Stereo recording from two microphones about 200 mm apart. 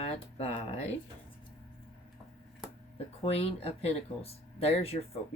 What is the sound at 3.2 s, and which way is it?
Speech, 30° left (ahead or behind).